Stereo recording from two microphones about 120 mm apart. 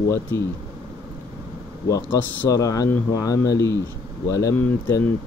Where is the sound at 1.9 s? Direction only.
25° left (ahead or behind).